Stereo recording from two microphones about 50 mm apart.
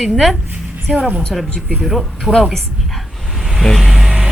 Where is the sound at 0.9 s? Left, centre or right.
Right.